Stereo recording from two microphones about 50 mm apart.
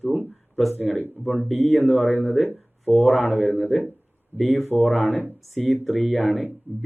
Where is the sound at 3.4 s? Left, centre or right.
Left.